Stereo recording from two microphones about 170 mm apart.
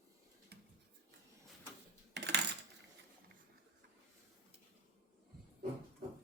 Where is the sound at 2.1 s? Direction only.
80° right.